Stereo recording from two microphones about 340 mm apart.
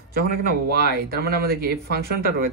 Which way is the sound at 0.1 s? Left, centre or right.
Right.